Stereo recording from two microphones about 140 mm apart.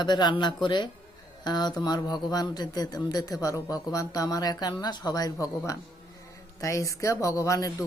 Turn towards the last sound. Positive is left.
turn(degrees=25)  # may be behind; listen again after turning